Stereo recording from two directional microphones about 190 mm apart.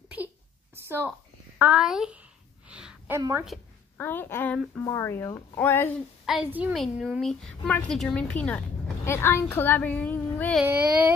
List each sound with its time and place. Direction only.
0.8 s a woman's voice: 10° right (ahead or behind)
2.7 s a sound: 5° right (ahead or behind)
3.2 s child singing: 20° right (ahead or behind)
4.0 s speech: 10° left (ahead or behind)
6.2 s a woman's voice: 5° right (ahead or behind)
10.6 s child singing: 10° right (ahead or behind)